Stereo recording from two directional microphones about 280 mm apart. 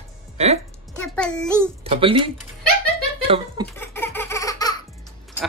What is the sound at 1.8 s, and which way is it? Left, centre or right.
Speech, centre.